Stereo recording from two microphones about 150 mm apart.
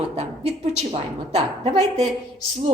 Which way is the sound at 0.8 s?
45° right (ahead or behind).